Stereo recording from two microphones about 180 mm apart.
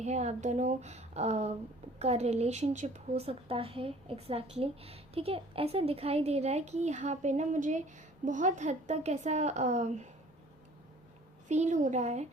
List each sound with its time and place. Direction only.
0.0 s a woman's voice: 40° right (ahead or behind)
11.4 s a woman's voice: 40° right (ahead or behind)